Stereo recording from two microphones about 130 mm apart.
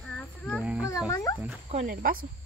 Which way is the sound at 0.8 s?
25° left (ahead or behind).